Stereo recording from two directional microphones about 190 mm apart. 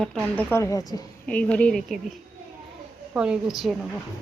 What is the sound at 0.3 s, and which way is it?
Speech, 15° left (ahead or behind).